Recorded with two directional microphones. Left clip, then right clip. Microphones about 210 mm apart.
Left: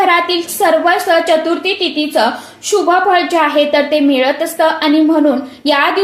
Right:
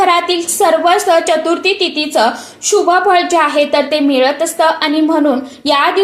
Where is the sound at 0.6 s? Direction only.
25° right (ahead or behind).